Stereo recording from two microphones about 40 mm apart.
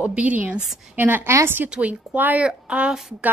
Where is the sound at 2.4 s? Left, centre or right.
Right.